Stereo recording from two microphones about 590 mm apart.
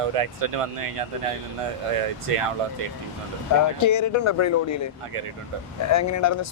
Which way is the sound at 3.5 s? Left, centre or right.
Left.